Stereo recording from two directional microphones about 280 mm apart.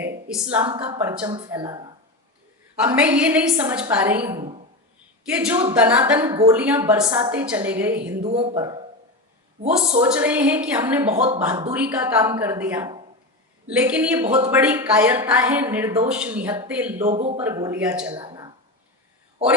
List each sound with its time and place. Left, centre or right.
0.3 s a woman's voice: centre
0.6 s a woman's voice: centre
8.2 s speech: right
10.0 s a woman's voice: centre
17.1 s speech: right
17.3 s speech: centre
18.1 s a sound: centre